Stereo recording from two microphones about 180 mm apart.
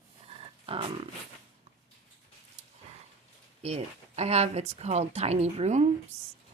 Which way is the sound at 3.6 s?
35° right (ahead or behind).